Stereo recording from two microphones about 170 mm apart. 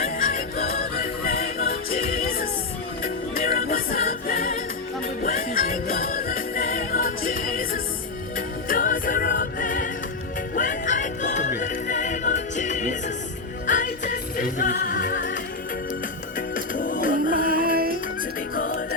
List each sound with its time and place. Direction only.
0.0 s music: 50° left (ahead or behind)
16.6 s music: 50° left (ahead or behind)
17.6 s music: 60° right (ahead or behind)